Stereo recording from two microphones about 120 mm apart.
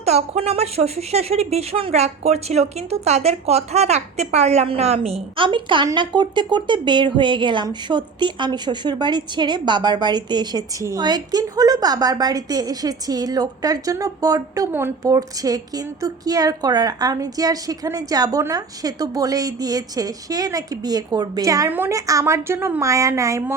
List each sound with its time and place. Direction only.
0.0 s a woman's voice: 60° right (ahead or behind); by 14.7 s 30° right (ahead or behind)
14.7 s a woman's voice: 20° right (ahead or behind)
15.1 s a woman's voice: 30° right (ahead or behind)